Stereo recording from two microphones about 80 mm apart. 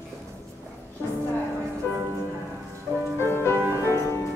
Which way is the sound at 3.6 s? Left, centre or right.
Right.